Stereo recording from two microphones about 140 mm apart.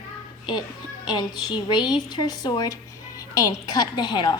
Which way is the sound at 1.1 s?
30° left (ahead or behind).